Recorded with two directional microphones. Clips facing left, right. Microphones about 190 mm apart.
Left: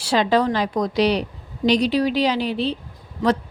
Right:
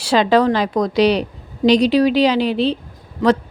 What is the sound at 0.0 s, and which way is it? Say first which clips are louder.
A woman's voice: right 4 dB; 90° right.